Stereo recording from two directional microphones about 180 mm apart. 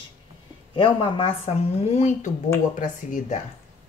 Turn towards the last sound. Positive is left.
turn(degrees=45)  # may be behind; listen again after turning